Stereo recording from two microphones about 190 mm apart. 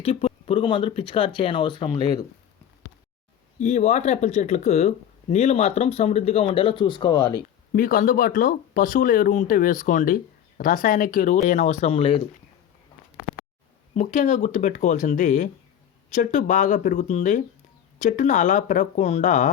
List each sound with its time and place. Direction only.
0.0 s speech: 30° left (ahead or behind)
3.6 s speech: 35° left (ahead or behind); by 7.3 s 20° left (ahead or behind)
7.7 s speech: 45° left (ahead or behind); by 12.2 s 30° left (ahead or behind)
13.9 s speech: 40° left (ahead or behind)